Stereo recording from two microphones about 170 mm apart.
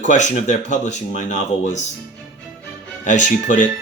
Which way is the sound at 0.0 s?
45° left (ahead or behind).